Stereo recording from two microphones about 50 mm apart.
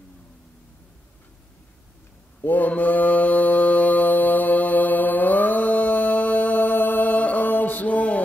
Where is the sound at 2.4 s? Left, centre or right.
Left.